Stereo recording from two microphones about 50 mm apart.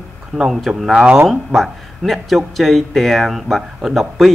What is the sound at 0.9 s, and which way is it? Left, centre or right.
Speech, right.